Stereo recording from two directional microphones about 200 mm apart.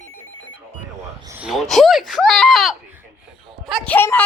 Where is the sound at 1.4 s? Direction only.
Centre (ahead or behind).